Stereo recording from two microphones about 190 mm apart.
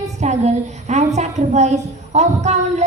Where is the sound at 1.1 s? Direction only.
35° right (ahead or behind).